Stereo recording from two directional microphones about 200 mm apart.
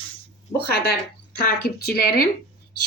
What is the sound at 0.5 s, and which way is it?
Speech, 55° left (ahead or behind).